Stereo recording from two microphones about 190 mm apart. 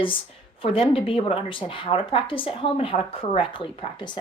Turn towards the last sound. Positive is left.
turn(degrees=30)  # may be behind; listen again after turning